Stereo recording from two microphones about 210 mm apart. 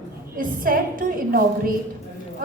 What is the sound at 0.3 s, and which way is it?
A woman's voice, 40° right (ahead or behind).